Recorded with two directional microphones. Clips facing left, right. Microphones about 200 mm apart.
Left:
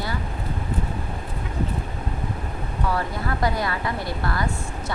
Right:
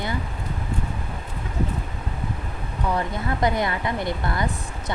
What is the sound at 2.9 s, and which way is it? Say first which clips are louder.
Speech: right 3 dB; 20° right (ahead or behind).